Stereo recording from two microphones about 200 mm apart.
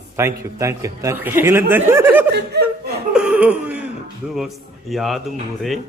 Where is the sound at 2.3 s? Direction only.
55° right (ahead or behind).